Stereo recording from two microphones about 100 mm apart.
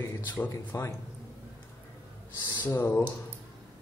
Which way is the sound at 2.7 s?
25° left (ahead or behind).